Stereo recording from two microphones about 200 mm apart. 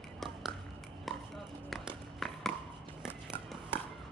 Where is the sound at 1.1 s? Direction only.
Centre (ahead or behind).